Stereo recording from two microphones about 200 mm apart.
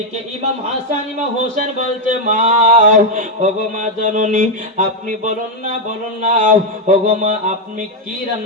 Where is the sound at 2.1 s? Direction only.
40° right (ahead or behind).